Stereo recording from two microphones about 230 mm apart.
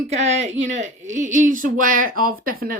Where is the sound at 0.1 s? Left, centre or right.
Right.